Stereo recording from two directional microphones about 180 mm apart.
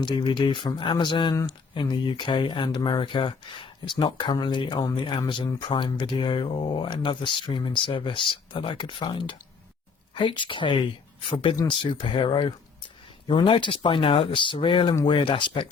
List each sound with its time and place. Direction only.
0.0 s speech: 25° left (ahead or behind)